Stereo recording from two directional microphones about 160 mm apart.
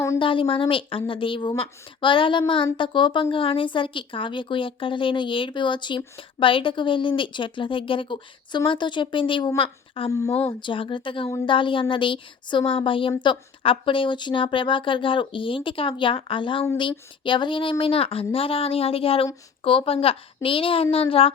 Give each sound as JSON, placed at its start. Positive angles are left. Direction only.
{"t": 0.2, "sound": "a woman's voice", "side_deg": 30}
{"t": 10.1, "sound": "a woman's voice", "side_deg": 20}
{"t": 10.6, "sound": "a woman's voice", "side_deg": 30}